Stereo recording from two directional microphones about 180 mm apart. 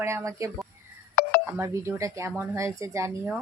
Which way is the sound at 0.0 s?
15° right (ahead or behind).